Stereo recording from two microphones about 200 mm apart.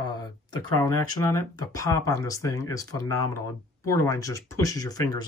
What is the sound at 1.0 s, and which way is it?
Speech, 20° left (ahead or behind).